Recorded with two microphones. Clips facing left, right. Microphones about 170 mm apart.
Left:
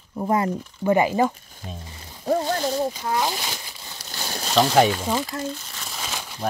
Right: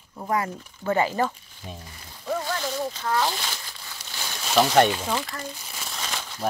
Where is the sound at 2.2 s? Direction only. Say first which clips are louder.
Left 6 dB; 40° left (ahead or behind).